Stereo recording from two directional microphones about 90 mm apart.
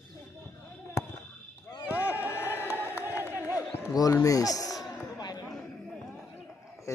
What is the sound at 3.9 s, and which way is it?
Speech, 45° left (ahead or behind).